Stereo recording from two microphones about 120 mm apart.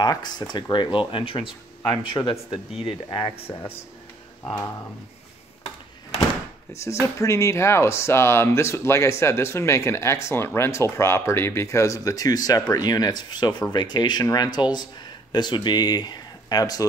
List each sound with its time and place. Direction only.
0.0 s speech: 35° left (ahead or behind)
6.7 s speech: 25° left (ahead or behind)